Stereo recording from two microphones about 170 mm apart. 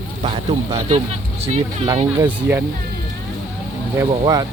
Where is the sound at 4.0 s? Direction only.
20° right (ahead or behind).